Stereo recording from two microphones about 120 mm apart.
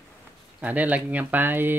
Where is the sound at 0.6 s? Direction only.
15° right (ahead or behind).